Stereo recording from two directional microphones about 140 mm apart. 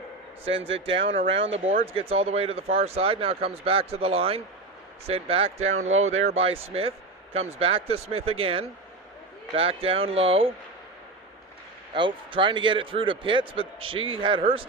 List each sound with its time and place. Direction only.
0.9 s a man's voice: 40° right (ahead or behind)
11.9 s a man's voice: 35° right (ahead or behind)